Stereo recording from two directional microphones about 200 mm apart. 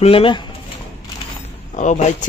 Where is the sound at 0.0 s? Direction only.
25° left (ahead or behind).